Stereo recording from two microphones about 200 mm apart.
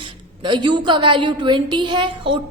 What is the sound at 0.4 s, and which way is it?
A woman's voice, 25° right (ahead or behind).